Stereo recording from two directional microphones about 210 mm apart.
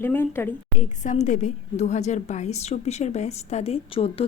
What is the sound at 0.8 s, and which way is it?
A woman's voice, 35° left (ahead or behind).